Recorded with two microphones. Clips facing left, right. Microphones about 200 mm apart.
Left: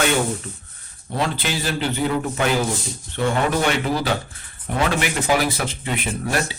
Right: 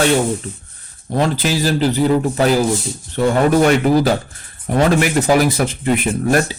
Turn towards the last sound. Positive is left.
turn(degrees=-45)  # may be behind; listen again after turning